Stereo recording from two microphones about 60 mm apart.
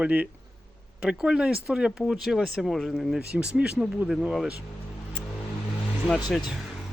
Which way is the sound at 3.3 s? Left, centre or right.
Centre.